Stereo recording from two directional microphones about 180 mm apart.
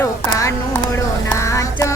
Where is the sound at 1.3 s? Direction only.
15° left (ahead or behind).